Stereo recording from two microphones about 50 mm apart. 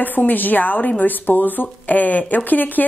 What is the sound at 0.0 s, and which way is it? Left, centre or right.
Speech, left.